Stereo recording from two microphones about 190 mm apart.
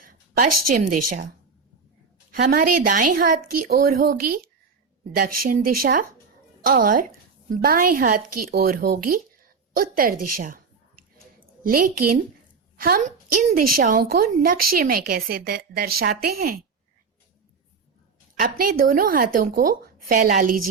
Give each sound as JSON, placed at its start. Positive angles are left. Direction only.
{"t": 0.3, "sound": "a woman's voice", "side_deg": -45}
{"t": 2.3, "sound": "a woman's voice", "side_deg": -50}
{"t": 18.3, "sound": "a woman's voice", "side_deg": -50}